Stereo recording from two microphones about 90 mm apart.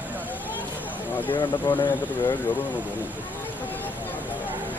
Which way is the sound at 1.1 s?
20° left (ahead or behind).